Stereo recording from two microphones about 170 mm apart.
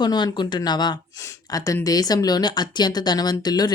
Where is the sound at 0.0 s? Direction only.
25° left (ahead or behind).